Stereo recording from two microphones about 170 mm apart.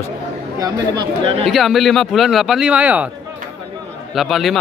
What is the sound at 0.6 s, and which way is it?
Speech, 25° right (ahead or behind).